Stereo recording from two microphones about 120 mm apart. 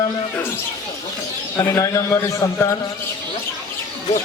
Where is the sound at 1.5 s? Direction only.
25° left (ahead or behind).